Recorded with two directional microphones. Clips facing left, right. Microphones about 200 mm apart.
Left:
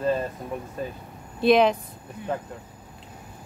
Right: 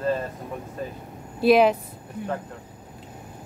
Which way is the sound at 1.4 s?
5° right (ahead or behind).